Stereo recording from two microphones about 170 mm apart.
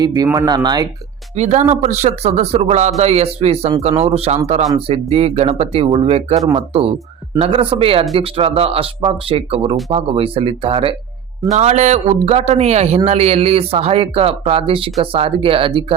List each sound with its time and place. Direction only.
0.0 s speech: 20° right (ahead or behind)
1.4 s speech: 45° right (ahead or behind)
11.5 s speech: 45° right (ahead or behind)